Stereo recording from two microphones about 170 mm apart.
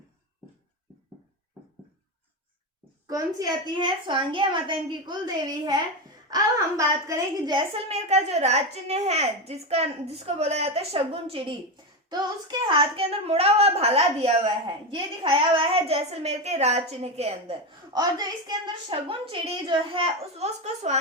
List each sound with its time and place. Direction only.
3.1 s a woman's voice: 20° right (ahead or behind)
7.9 s a woman's voice: 40° right (ahead or behind)